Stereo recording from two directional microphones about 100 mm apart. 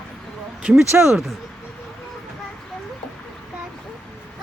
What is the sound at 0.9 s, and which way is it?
Speech, 25° right (ahead or behind).